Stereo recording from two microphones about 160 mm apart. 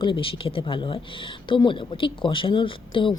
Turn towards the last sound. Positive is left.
turn(degrees=30)  # may be behind; listen again after turning